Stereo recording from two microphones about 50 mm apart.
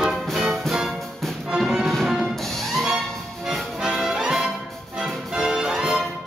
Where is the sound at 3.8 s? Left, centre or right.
Centre.